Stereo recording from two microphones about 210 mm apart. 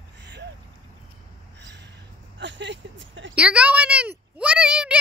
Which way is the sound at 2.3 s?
60° right (ahead or behind).